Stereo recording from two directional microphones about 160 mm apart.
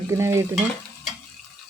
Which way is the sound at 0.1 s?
20° right (ahead or behind).